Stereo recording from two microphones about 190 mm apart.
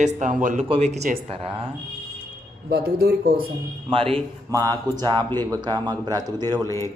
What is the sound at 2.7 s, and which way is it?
Speech, 60° right (ahead or behind).